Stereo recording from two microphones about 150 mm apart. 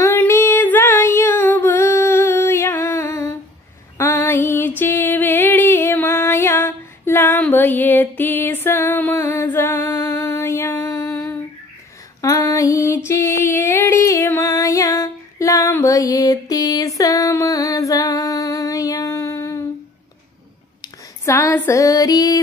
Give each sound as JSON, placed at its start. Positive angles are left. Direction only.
{"t": 0.0, "sound": "female singing", "side_deg": 15}
{"t": 4.0, "sound": "music", "side_deg": 15}
{"t": 12.2, "sound": "female singing", "side_deg": 20}
{"t": 20.8, "sound": "female singing", "side_deg": 20}